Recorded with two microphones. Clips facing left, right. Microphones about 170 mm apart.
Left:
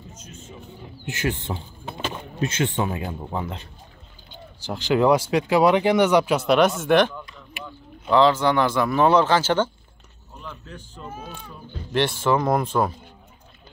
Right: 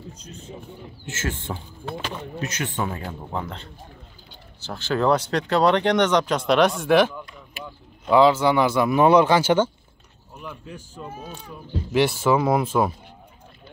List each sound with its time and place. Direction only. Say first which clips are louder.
0.1 s speech: right 2 dB; 35° right (ahead or behind)
1.0 s speech: left 3 dB; 15° left (ahead or behind); by 12.9 s 5° right (ahead or behind)